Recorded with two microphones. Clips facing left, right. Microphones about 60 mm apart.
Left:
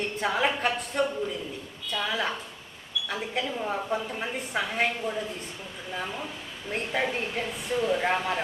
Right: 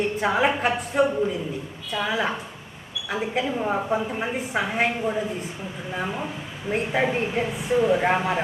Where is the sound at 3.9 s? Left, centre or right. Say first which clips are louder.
Right 5 dB; centre.